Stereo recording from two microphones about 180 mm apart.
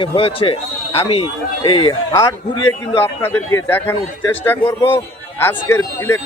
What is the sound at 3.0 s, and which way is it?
A man's voice, 10° left (ahead or behind).